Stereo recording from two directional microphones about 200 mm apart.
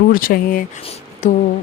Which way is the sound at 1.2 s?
40° left (ahead or behind).